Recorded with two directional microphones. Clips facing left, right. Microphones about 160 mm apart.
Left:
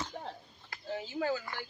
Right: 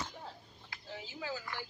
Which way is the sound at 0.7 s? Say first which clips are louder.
Left 9 dB; 50° left (ahead or behind).